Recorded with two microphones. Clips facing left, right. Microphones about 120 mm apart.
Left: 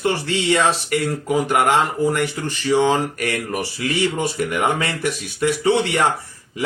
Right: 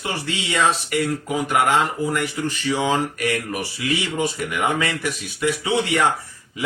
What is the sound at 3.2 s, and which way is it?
Speech, 45° left (ahead or behind).